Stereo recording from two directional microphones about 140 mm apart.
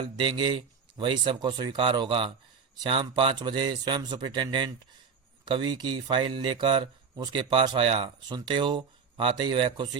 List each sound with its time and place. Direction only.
0.0 s speech: 35° right (ahead or behind)